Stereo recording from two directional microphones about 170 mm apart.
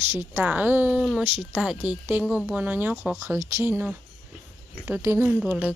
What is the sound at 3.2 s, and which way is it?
Speech, 20° right (ahead or behind).